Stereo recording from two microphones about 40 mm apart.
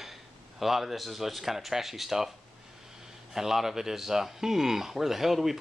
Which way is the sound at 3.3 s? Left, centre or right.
Centre.